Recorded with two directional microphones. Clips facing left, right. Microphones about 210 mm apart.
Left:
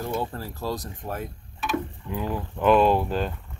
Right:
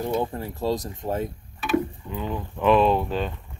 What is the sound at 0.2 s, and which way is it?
Speech, 20° right (ahead or behind).